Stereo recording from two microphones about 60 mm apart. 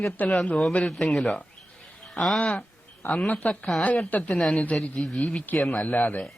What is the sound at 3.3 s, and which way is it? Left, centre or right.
Speech, left.